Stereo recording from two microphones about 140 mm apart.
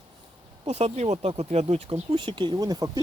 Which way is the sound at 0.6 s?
50° right (ahead or behind).